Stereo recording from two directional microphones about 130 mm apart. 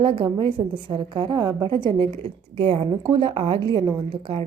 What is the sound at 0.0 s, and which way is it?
A woman's voice, 45° right (ahead or behind).